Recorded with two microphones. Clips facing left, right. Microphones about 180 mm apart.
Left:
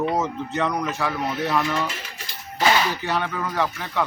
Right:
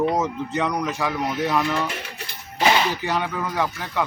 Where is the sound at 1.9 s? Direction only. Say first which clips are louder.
Right 3 dB; 60° right (ahead or behind).